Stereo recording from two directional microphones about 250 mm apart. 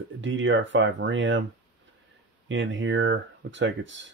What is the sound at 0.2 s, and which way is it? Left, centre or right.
Speech, right.